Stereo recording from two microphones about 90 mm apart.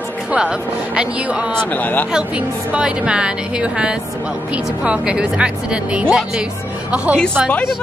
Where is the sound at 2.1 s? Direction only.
10° right (ahead or behind).